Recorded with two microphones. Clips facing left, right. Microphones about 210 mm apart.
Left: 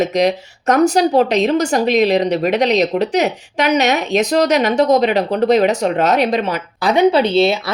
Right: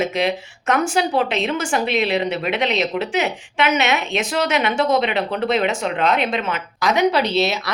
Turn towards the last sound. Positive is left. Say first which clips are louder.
# left 6 dB
turn(degrees=30)  # may be behind; listen again after turning